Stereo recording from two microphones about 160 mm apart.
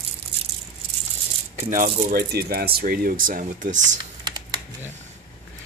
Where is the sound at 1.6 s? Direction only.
55° right (ahead or behind).